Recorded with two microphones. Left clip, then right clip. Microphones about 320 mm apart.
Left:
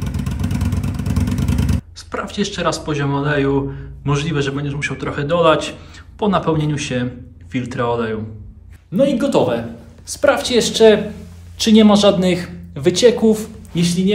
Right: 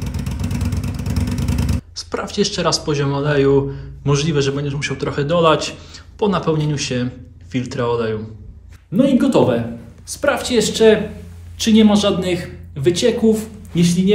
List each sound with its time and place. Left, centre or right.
0.3 s a man's voice: centre